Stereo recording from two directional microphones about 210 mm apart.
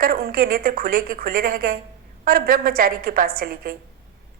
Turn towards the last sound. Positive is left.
turn(degrees=-45)  # may be behind; listen again after turning